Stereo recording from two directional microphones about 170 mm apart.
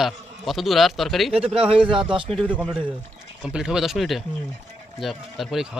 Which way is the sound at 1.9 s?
30° right (ahead or behind).